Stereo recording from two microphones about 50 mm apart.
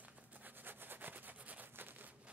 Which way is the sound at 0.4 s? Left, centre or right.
Right.